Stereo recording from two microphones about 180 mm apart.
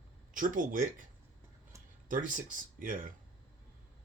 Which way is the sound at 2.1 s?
50° right (ahead or behind).